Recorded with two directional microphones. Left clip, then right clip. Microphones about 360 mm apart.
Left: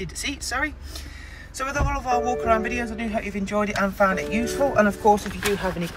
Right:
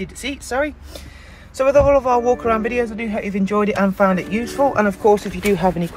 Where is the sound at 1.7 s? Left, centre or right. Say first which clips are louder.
Right 12 dB; centre.